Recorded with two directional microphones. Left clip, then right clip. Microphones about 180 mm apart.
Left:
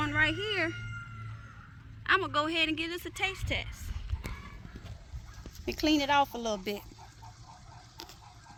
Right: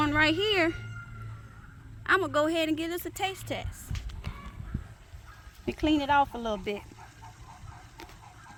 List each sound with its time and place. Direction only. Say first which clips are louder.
0.0 s music: right 4 dB; 55° right (ahead or behind)
2.0 s a woman's voice: right 3 dB; 40° right (ahead or behind)
5.6 s speech: right 1 dB; 5° right (ahead or behind)